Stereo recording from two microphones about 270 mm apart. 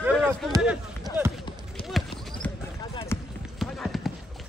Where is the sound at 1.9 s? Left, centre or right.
Centre.